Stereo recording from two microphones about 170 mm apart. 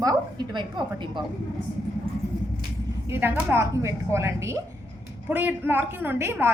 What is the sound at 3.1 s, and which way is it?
Speech, 10° right (ahead or behind).